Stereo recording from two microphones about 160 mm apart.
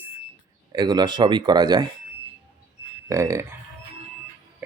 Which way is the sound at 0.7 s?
25° right (ahead or behind).